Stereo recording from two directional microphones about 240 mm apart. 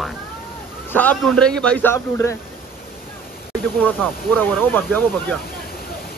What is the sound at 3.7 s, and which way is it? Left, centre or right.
Speech, centre.